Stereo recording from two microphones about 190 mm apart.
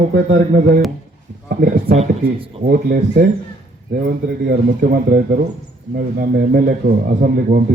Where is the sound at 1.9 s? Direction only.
35° right (ahead or behind).